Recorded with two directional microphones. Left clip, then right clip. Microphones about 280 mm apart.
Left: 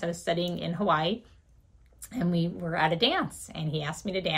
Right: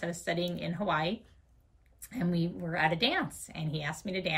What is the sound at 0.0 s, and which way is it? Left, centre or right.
A woman's voice, centre.